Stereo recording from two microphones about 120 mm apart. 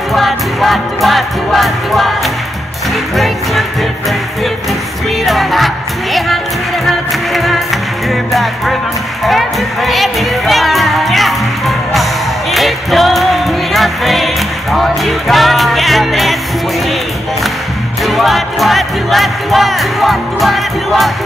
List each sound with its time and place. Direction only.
0.1 s music: centre (ahead or behind)
5.2 s music: centre (ahead or behind)
18.0 s music: centre (ahead or behind)